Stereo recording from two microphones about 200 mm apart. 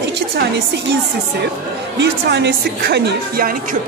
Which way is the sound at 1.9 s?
60° right (ahead or behind).